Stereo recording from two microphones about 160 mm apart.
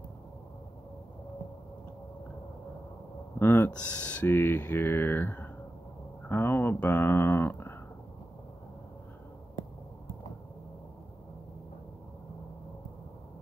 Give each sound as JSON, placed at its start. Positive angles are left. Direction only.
{"t": 3.3, "sound": "speech", "side_deg": 15}